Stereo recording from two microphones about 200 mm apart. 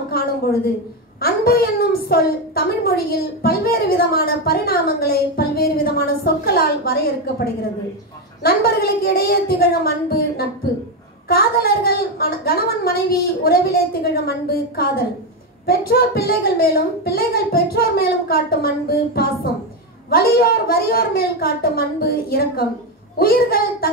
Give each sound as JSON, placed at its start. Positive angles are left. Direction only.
{"t": 0.1, "sound": "a sound", "side_deg": 50}
{"t": 1.2, "sound": "a woman's voice", "side_deg": 50}
{"t": 8.4, "sound": "a woman's voice", "side_deg": 50}